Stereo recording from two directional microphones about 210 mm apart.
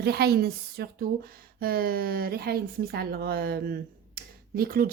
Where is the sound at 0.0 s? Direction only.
50° right (ahead or behind).